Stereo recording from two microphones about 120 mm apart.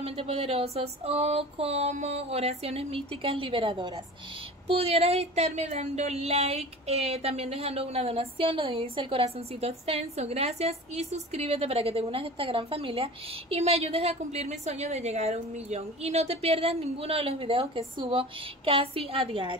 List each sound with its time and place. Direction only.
0.0 s speech: 55° right (ahead or behind)
4.6 s a woman's voice: 60° right (ahead or behind)